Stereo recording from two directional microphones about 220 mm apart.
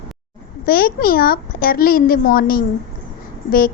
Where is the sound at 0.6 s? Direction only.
40° left (ahead or behind).